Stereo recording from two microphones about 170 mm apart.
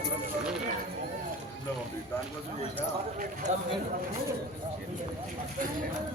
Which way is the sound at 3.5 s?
45° right (ahead or behind).